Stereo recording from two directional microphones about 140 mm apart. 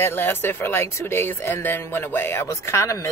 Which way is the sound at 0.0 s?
15° left (ahead or behind).